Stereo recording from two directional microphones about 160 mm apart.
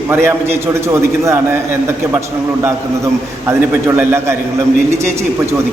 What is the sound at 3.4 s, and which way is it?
Speech, 15° right (ahead or behind).